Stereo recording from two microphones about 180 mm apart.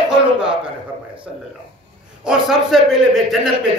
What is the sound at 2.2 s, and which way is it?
A man's voice, 5° right (ahead or behind).